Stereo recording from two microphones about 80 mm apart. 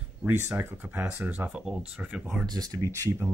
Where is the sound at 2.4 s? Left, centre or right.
Right.